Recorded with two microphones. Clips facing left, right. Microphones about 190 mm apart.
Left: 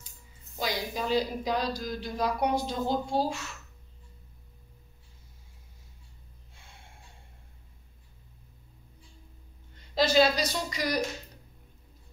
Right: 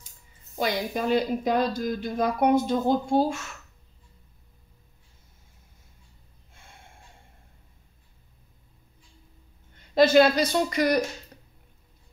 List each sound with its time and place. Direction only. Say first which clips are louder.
0.6 s speech: right 5 dB; 55° right (ahead or behind)
9.9 s speech: right 6 dB; 55° right (ahead or behind)